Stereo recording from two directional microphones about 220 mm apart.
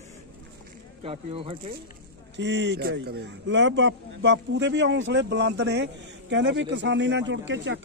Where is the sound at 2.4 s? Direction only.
55° right (ahead or behind).